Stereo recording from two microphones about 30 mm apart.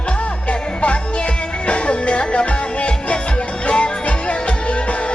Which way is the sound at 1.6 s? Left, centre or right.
Left.